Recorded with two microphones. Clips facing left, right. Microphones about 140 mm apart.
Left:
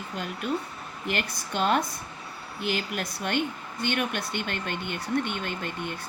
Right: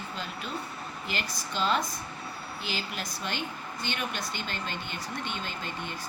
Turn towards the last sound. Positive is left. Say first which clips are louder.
# left 4 dB
turn(degrees=55)  # may be behind; listen again after turning